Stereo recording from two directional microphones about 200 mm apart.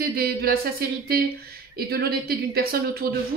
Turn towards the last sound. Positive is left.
turn(degrees=-50)  # may be behind; listen again after turning